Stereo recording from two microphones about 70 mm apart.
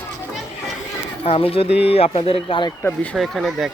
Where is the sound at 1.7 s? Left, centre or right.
Right.